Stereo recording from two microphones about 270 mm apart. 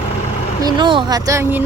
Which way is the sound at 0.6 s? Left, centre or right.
Centre.